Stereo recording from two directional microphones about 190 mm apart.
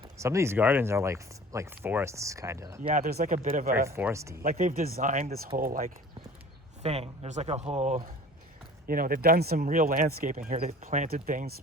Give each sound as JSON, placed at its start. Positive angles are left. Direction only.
{"t": 0.2, "sound": "speech", "side_deg": -15}
{"t": 3.0, "sound": "speech", "side_deg": -55}
{"t": 3.8, "sound": "speech", "side_deg": -15}
{"t": 4.4, "sound": "speech", "side_deg": -50}
{"t": 6.8, "sound": "speech", "side_deg": -30}
{"t": 8.9, "sound": "speech", "side_deg": -50}
{"t": 10.7, "sound": "speech", "side_deg": -35}